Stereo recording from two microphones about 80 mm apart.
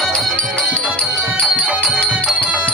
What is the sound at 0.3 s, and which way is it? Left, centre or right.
Music, centre.